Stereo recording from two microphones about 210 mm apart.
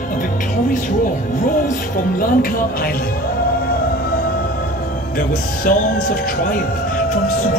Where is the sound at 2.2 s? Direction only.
40° left (ahead or behind).